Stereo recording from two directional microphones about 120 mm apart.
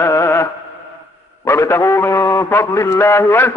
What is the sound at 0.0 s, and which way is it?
Chant, 25° left (ahead or behind).